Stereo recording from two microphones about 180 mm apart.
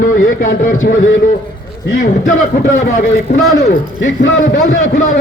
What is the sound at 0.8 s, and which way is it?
Speech, 90° left.